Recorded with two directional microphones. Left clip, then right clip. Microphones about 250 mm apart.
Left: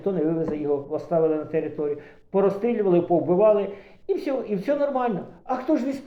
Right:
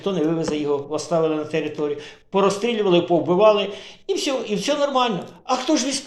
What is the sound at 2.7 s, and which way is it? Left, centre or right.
A man's voice, right.